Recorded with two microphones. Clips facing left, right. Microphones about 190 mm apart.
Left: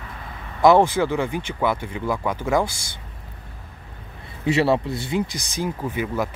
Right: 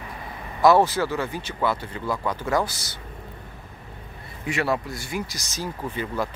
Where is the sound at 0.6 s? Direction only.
20° left (ahead or behind).